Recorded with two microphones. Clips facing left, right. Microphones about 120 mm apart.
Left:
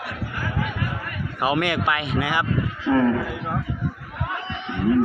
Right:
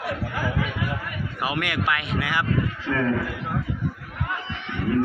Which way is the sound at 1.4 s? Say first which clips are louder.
Left 5 dB; 25° left (ahead or behind).